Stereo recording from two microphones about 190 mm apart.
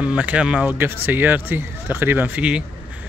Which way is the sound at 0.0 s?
5° right (ahead or behind).